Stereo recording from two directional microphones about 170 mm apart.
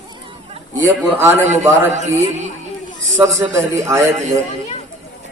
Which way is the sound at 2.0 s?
45° right (ahead or behind).